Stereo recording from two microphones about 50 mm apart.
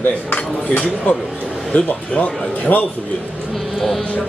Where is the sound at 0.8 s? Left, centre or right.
Left.